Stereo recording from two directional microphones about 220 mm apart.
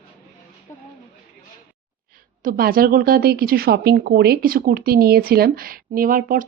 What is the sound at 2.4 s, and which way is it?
A woman's voice, 40° right (ahead or behind).